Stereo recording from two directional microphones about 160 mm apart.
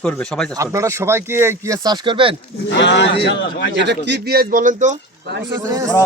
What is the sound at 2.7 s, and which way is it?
Speech, 90° left.